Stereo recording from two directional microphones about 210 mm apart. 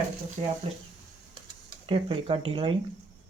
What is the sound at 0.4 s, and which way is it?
Speech, 25° right (ahead or behind).